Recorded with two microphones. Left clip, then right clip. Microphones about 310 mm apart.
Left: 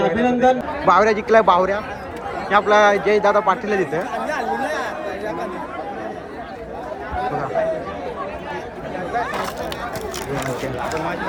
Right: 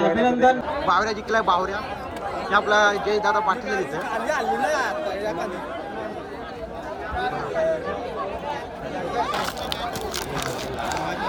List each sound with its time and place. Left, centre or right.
0.0 s a man's voice: right
0.9 s a man's voice: centre
10.3 s speech: centre